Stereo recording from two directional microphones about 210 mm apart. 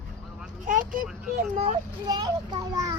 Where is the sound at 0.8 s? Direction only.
40° right (ahead or behind).